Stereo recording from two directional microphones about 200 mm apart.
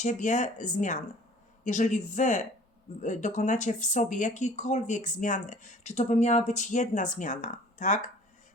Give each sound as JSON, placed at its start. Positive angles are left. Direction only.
{"t": 0.0, "sound": "speech", "side_deg": 40}